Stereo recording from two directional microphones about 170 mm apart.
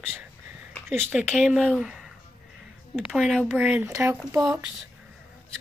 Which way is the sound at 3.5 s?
10° right (ahead or behind).